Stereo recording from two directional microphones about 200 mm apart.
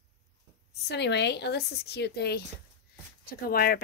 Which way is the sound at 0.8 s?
60° left (ahead or behind).